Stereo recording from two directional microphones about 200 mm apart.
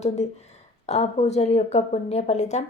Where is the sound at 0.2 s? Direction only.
35° left (ahead or behind).